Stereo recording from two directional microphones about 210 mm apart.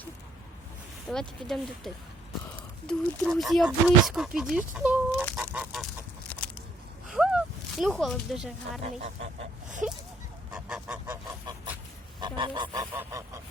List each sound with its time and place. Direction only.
1.0 s speech: 5° left (ahead or behind)
5.4 s goose: 5° right (ahead or behind)
7.1 s speech: centre (ahead or behind)
8.8 s speech: 30° right (ahead or behind)
10.5 s goose: 5° right (ahead or behind)
12.2 s goose: 20° right (ahead or behind)